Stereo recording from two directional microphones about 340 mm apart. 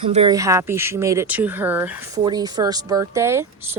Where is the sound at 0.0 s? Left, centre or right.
Centre.